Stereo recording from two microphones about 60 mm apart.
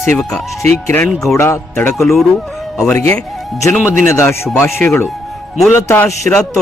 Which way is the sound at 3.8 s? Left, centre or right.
Left.